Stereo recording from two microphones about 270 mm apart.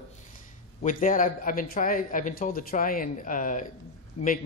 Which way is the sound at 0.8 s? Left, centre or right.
Left.